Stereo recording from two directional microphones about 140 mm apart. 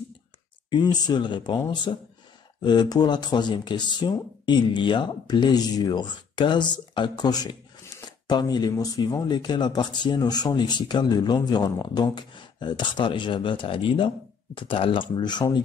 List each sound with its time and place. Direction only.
0.7 s speech: 30° left (ahead or behind)